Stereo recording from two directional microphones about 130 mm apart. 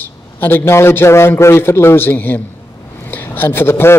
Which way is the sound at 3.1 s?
15° left (ahead or behind).